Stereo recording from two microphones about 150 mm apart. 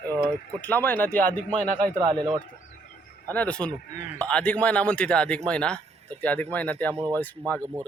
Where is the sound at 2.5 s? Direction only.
65° left (ahead or behind); by 3.2 s 80° left.